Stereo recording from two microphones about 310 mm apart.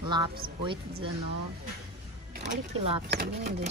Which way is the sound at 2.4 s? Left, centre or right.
Centre.